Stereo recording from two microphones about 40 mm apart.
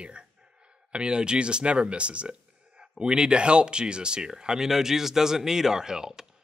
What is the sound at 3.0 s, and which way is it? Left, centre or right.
A man's voice, right.